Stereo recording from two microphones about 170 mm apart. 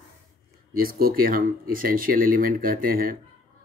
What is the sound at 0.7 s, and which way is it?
Speech, 60° right (ahead or behind).